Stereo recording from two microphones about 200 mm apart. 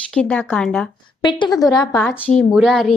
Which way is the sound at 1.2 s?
25° left (ahead or behind).